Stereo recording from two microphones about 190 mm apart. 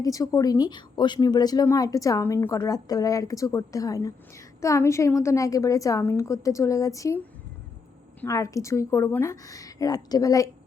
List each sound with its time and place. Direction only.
0.0 s a woman's voice: 20° left (ahead or behind)
8.2 s a woman's voice: 15° left (ahead or behind)